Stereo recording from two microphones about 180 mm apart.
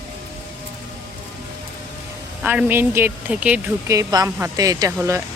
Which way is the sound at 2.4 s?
10° right (ahead or behind).